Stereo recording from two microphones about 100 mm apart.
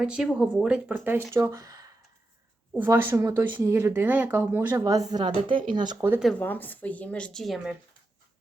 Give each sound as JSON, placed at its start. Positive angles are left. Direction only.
{"t": 0.0, "sound": "speech", "side_deg": -5}
{"t": 2.7, "sound": "speech", "side_deg": -20}
{"t": 6.4, "sound": "speech", "side_deg": 20}
{"t": 7.4, "sound": "speech", "side_deg": 0}